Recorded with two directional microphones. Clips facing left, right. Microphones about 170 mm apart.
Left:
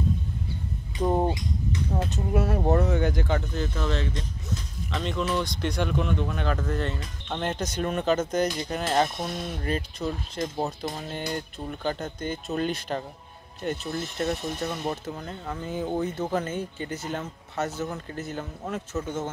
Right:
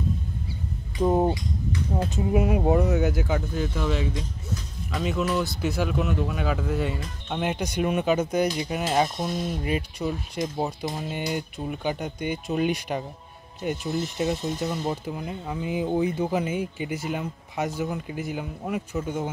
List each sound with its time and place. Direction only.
1.0 s speech: 5° right (ahead or behind)